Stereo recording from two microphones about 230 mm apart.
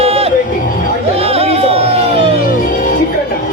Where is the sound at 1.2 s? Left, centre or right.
Right.